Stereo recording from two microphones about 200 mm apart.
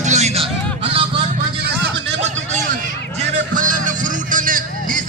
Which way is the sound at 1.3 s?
55° right (ahead or behind).